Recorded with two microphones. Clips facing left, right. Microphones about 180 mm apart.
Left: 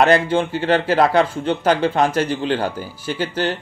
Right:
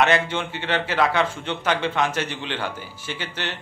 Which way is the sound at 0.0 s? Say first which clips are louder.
Left 6 dB; 35° left (ahead or behind).